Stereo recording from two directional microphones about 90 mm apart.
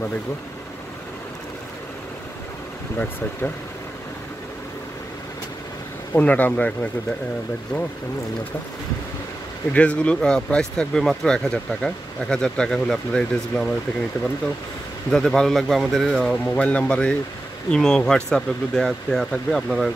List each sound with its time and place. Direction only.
6.1 s speech: 20° left (ahead or behind)
9.7 s speech: 15° left (ahead or behind)
15.0 s speech: 5° left (ahead or behind)
16.4 s speech: 15° left (ahead or behind)